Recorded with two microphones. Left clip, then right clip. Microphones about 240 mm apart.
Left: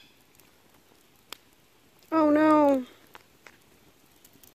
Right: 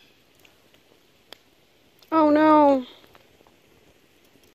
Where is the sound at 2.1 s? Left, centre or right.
Centre.